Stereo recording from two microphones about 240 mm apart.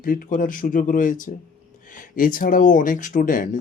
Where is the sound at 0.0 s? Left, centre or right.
Left.